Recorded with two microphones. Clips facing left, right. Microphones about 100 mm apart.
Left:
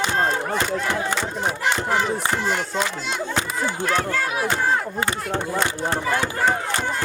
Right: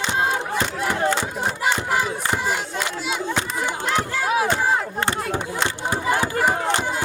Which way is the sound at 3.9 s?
15° right (ahead or behind).